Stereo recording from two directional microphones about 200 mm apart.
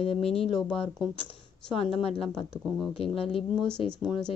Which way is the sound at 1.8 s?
30° left (ahead or behind).